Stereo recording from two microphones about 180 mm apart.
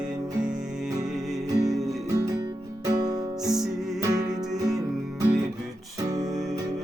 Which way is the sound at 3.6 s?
Centre (ahead or behind).